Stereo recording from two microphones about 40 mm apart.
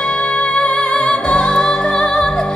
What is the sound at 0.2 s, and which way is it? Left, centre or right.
Music, left.